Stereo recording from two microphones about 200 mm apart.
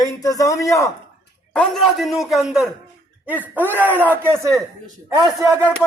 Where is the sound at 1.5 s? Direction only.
5° left (ahead or behind); by 4.6 s 15° right (ahead or behind).